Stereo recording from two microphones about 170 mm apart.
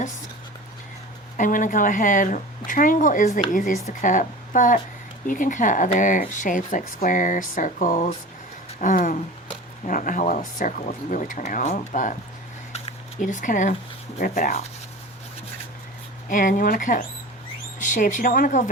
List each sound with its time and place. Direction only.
1.4 s speech: 50° left (ahead or behind)
12.7 s a sound: 50° left (ahead or behind)
14.2 s speech: 50° left (ahead or behind)
16.3 s speech: 50° left (ahead or behind)